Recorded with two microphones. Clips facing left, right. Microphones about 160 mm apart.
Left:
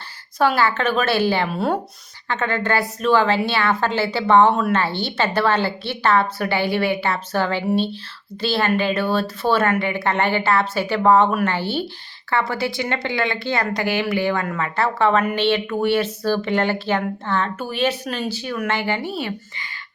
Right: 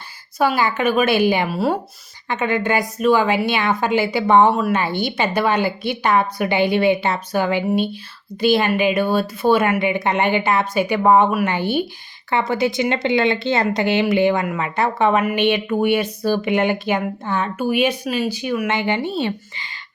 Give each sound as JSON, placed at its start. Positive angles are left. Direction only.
{"t": 0.3, "sound": "a woman's voice", "side_deg": -10}
{"t": 1.5, "sound": "speech", "side_deg": -5}
{"t": 2.2, "sound": "a woman's voice", "side_deg": -15}